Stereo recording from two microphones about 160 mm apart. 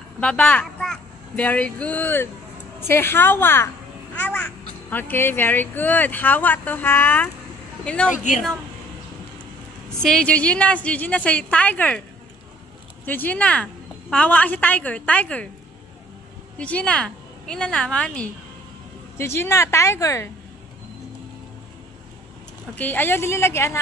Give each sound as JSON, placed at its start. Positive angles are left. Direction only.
{"t": 0.2, "sound": "a child's voice", "side_deg": 5}
{"t": 8.1, "sound": "speech", "side_deg": 50}
{"t": 10.0, "sound": "speech", "side_deg": 5}
{"t": 13.0, "sound": "speech", "side_deg": 10}
{"t": 16.5, "sound": "speech", "side_deg": 10}
{"t": 22.8, "sound": "speech", "side_deg": 10}